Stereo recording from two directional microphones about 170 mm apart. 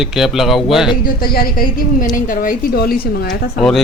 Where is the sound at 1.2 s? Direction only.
60° left (ahead or behind).